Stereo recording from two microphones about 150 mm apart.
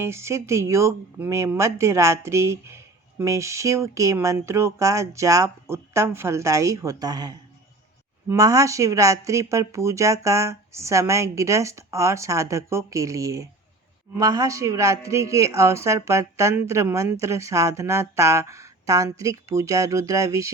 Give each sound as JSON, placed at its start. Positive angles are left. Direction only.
{"t": 0.0, "sound": "speech", "side_deg": -20}